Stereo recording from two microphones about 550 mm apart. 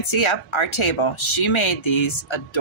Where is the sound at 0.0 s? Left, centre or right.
Left.